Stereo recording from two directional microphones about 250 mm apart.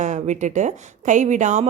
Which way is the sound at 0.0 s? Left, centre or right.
Right.